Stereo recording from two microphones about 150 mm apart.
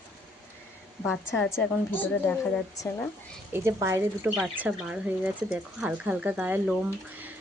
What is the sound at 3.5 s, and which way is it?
Speech, 20° right (ahead or behind).